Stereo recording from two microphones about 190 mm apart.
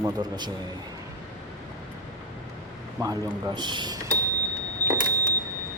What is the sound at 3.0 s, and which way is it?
Speech, 20° right (ahead or behind).